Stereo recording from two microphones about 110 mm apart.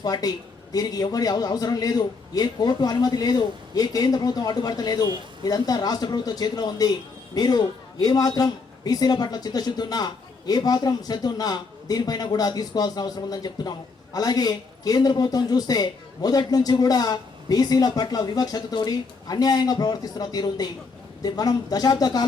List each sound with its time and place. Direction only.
0.0 s speech: 35° left (ahead or behind)